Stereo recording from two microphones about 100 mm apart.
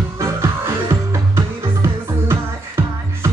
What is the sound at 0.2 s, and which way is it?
Music, 30° right (ahead or behind).